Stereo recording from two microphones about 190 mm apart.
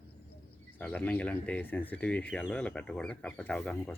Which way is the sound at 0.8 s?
10° left (ahead or behind).